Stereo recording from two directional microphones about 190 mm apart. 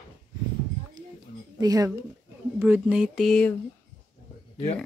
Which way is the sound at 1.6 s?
20° right (ahead or behind).